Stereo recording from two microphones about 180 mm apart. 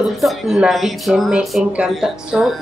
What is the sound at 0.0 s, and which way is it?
Speech, centre (ahead or behind).